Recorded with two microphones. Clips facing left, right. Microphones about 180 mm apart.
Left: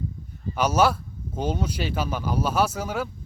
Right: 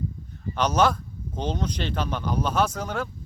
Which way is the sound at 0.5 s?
10° left (ahead or behind).